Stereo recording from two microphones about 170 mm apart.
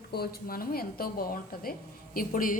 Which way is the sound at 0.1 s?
65° left (ahead or behind).